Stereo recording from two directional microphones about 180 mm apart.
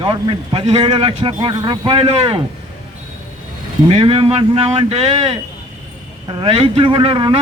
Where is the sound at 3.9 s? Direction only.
30° right (ahead or behind).